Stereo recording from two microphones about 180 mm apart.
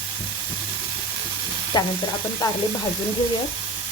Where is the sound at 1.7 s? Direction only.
25° left (ahead or behind).